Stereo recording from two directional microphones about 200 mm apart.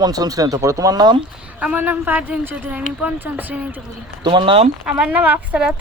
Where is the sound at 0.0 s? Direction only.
20° right (ahead or behind).